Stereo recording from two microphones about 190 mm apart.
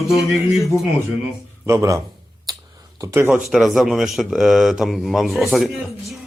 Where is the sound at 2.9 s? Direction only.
10° right (ahead or behind).